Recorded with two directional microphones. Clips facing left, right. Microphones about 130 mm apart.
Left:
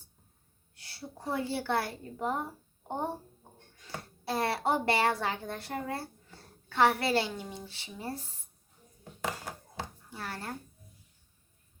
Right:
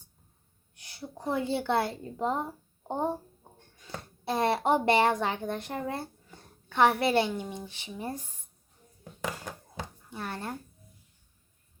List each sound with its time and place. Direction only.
0.8 s a woman's voice: 20° right (ahead or behind)
10.1 s speech: 20° right (ahead or behind)